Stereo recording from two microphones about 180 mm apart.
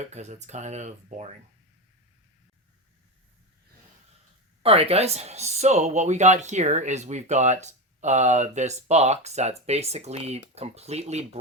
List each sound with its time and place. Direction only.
0.0 s speech: 40° right (ahead or behind)
4.6 s speech: 35° right (ahead or behind)